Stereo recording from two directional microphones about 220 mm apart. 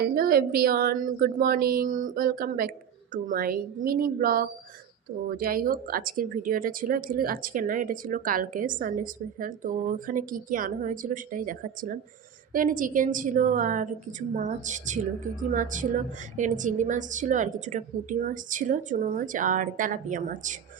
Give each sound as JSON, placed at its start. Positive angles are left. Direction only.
{"t": 0.1, "sound": "a woman's voice", "side_deg": -45}